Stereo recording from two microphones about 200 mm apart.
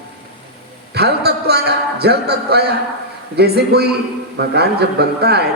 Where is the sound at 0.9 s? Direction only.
55° right (ahead or behind).